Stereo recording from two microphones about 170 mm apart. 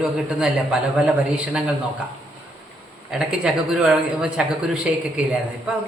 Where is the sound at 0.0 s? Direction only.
5° right (ahead or behind).